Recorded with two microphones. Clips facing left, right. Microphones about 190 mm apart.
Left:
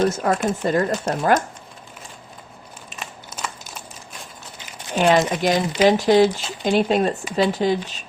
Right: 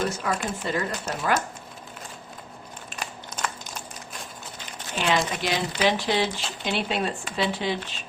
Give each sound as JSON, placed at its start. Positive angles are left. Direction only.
{"t": 0.0, "sound": "speech", "side_deg": 40}
{"t": 2.9, "sound": "crumpling", "side_deg": 5}
{"t": 4.9, "sound": "speech", "side_deg": 45}